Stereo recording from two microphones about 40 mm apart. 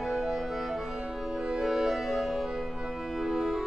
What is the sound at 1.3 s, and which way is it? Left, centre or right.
Music, centre.